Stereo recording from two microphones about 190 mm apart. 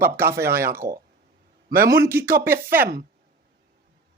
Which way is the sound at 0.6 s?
15° right (ahead or behind).